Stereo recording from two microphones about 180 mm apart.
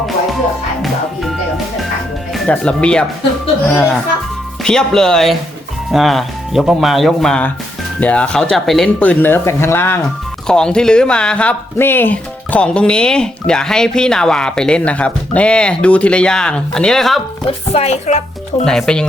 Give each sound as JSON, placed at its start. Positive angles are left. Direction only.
{"t": 0.8, "sound": "speech", "side_deg": 0}
{"t": 4.6, "sound": "speech", "side_deg": 5}
{"t": 17.4, "sound": "speech", "side_deg": 35}
{"t": 18.6, "sound": "speech", "side_deg": 5}